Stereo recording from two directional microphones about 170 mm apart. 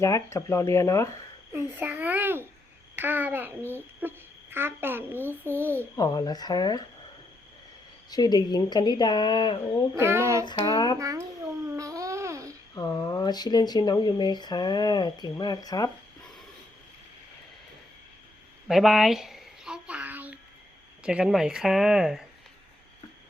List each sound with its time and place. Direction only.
0.0 s speech: 15° left (ahead or behind)
1.5 s a child's voice: 10° right (ahead or behind)
6.0 s speech: 20° left (ahead or behind)
8.1 s speech: 25° left (ahead or behind)
9.9 s a child's voice: 15° right (ahead or behind)
10.6 s speech: 20° left (ahead or behind)
11.7 s babbling: 20° right (ahead or behind)
12.7 s speech: 20° left (ahead or behind)
18.7 s a sound: centre (ahead or behind)
21.0 s speech: 5° right (ahead or behind)